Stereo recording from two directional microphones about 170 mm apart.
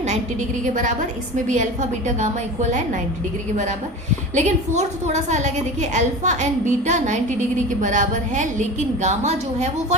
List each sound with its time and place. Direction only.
0.6 s a woman's voice: 50° right (ahead or behind)
4.4 s a woman's voice: 40° right (ahead or behind)